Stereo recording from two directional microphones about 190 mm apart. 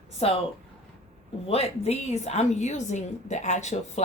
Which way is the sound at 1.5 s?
35° left (ahead or behind).